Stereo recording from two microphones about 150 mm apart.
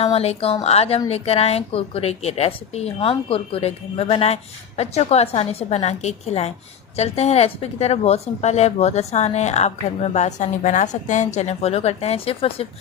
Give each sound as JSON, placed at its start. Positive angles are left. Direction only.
{"t": 0.0, "sound": "speech", "side_deg": 40}